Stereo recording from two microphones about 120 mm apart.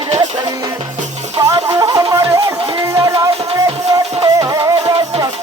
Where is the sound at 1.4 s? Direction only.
35° right (ahead or behind).